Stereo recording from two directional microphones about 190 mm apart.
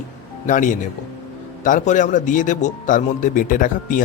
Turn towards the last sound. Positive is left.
turn(degrees=45)  # may be behind; listen again after turning